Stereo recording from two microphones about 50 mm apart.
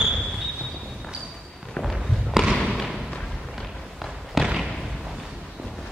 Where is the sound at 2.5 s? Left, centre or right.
Centre.